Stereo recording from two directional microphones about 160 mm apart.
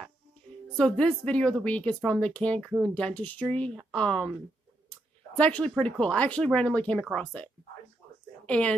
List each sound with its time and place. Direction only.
0.7 s speech: 5° left (ahead or behind)
5.4 s speech: 10° left (ahead or behind)
8.5 s speech: 5° left (ahead or behind)